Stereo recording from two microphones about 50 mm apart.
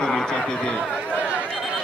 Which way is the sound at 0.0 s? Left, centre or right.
Centre.